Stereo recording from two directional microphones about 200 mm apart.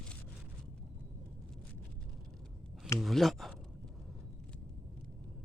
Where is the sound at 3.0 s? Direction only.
Centre (ahead or behind).